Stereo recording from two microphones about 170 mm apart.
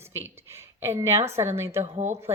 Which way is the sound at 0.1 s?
15° right (ahead or behind).